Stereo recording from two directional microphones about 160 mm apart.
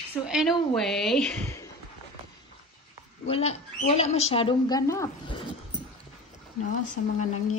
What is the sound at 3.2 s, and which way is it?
A woman's voice, 40° left (ahead or behind).